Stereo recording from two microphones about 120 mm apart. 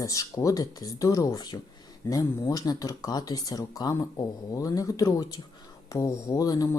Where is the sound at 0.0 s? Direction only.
30° left (ahead or behind).